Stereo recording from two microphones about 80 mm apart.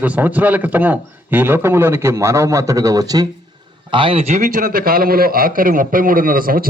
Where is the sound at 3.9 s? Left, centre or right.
Right.